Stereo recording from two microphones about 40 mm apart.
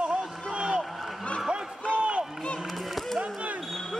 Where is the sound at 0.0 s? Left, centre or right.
Right.